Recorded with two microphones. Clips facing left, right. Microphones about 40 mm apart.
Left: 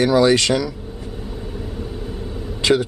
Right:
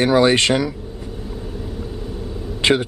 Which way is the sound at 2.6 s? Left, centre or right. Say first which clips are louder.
Even; right.